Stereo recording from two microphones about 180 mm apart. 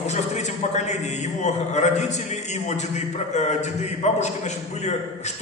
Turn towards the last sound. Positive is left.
turn(degrees=40)  # may be behind; listen again after turning